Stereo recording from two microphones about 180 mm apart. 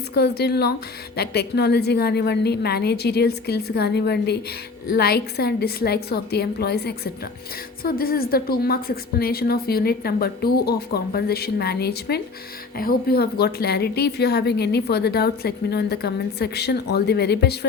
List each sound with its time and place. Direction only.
0.1 s a woman's voice: 65° left (ahead or behind)